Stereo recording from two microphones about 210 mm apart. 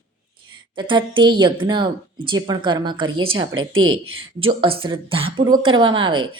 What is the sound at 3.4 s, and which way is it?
Speech, 75° right (ahead or behind).